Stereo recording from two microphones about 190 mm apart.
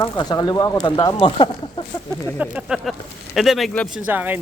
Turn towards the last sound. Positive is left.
turn(degrees=-10)  # may be behind; listen again after turning